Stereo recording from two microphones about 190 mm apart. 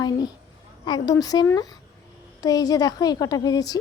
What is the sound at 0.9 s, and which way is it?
A woman's voice, 20° left (ahead or behind).